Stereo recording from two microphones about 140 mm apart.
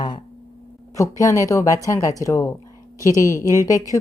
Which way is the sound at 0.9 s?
25° left (ahead or behind).